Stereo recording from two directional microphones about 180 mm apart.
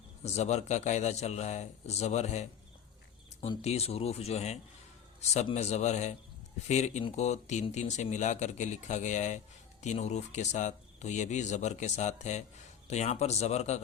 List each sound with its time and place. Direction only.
0.2 s speech: 40° left (ahead or behind)